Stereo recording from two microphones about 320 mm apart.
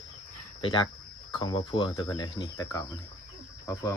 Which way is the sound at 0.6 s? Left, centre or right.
Centre.